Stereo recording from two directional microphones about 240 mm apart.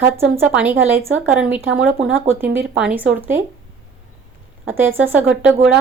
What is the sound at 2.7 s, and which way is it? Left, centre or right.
Speech, centre.